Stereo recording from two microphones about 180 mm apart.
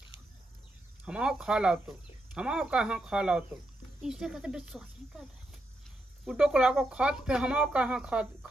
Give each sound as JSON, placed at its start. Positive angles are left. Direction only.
{"t": 1.0, "sound": "speech", "side_deg": -5}
{"t": 6.2, "sound": "speech", "side_deg": -5}